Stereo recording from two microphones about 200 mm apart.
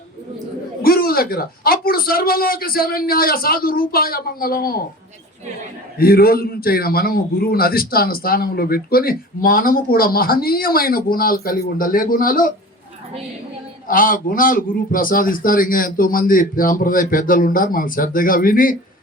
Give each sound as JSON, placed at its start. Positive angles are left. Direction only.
{"t": 0.8, "sound": "a man's voice", "side_deg": 50}
{"t": 6.0, "sound": "a man's voice", "side_deg": 50}
{"t": 13.8, "sound": "a man's voice", "side_deg": 45}